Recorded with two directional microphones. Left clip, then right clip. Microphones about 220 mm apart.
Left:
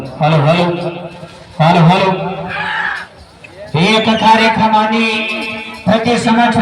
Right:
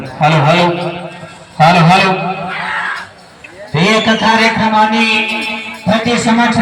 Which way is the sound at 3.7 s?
40° left (ahead or behind).